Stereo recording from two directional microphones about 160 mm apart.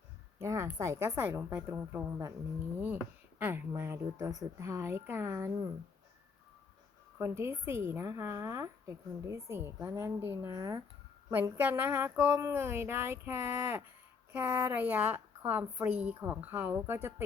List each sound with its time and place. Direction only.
0.3 s a woman's voice: 20° right (ahead or behind)
7.2 s a woman's voice: 15° right (ahead or behind)